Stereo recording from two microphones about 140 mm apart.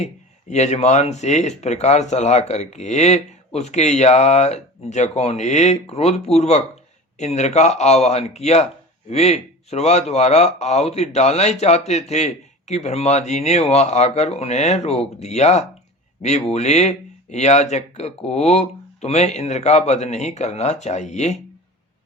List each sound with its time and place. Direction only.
0.5 s speech: 55° left (ahead or behind)